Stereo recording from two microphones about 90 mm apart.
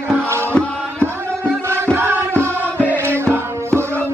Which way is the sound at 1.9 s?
25° right (ahead or behind).